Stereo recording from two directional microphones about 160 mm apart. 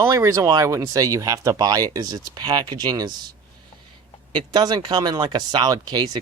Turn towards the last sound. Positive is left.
turn(degrees=-25)  # may be behind; listen again after turning